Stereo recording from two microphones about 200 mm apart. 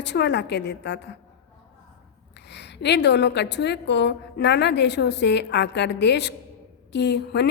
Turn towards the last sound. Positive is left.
turn(degrees=60)  # may be behind; listen again after turning